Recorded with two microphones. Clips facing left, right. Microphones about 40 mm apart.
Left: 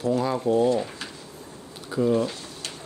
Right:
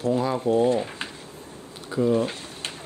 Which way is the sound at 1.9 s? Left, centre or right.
Centre.